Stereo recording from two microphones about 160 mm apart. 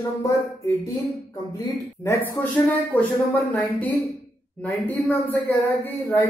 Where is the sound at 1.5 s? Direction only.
20° left (ahead or behind).